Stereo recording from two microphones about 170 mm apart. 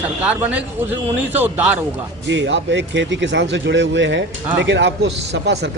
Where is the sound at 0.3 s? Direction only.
10° right (ahead or behind).